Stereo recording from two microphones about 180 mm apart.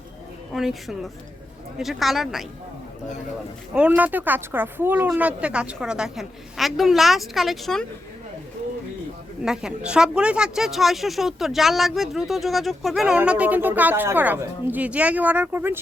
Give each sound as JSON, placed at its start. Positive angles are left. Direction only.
{"t": 0.5, "sound": "a woman's voice", "side_deg": 0}
{"t": 3.8, "sound": "a woman's voice", "side_deg": -10}
{"t": 9.4, "sound": "a woman's voice", "side_deg": -5}